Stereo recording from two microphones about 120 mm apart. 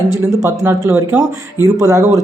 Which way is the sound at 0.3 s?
20° right (ahead or behind).